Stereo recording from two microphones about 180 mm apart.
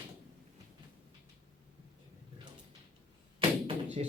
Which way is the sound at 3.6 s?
40° right (ahead or behind).